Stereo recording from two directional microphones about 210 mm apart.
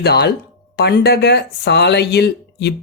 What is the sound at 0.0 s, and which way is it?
Speech, 50° left (ahead or behind).